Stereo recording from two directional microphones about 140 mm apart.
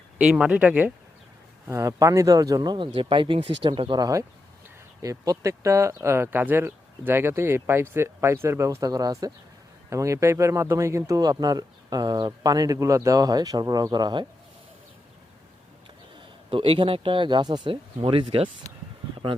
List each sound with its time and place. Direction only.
0.2 s speech: 5° right (ahead or behind)
1.6 s speech: 20° right (ahead or behind)
16.5 s speech: 40° right (ahead or behind)